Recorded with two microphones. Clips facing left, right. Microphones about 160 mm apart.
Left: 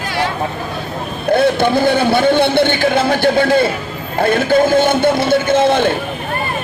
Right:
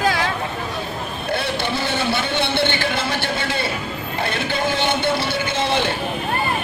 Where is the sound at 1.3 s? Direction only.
50° left (ahead or behind).